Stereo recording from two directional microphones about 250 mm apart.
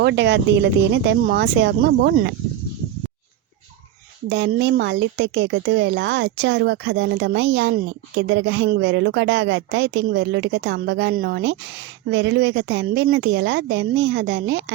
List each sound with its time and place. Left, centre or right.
0.0 s a woman's voice: right
4.3 s a woman's voice: right